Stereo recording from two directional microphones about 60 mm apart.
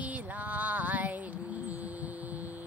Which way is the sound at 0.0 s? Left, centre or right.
Right.